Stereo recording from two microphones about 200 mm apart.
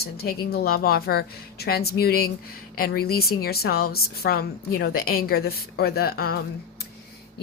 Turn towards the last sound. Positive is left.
turn(degrees=50)  # may be behind; listen again after turning